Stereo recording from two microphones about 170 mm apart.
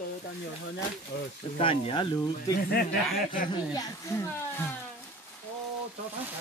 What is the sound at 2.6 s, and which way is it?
Speech, 65° left (ahead or behind).